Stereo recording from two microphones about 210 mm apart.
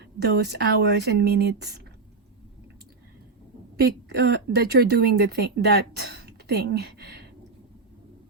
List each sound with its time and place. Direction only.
0.0 s a woman's voice: 50° right (ahead or behind)
3.8 s a woman's voice: 50° right (ahead or behind)